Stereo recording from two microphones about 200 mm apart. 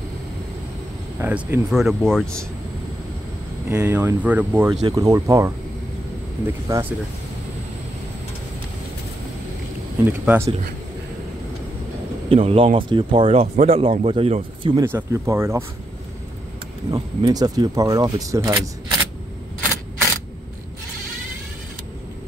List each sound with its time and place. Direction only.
1.2 s speech: 10° right (ahead or behind)
3.7 s speech: 10° right (ahead or behind)
10.0 s speech: 10° right (ahead or behind)
12.3 s speech: 30° right (ahead or behind)
14.8 s speech: 10° right (ahead or behind)
16.9 s speech: 20° right (ahead or behind)